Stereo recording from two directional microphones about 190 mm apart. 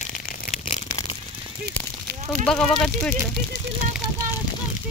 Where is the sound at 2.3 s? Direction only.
5° left (ahead or behind).